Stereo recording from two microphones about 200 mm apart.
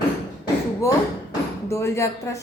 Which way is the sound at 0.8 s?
15° left (ahead or behind).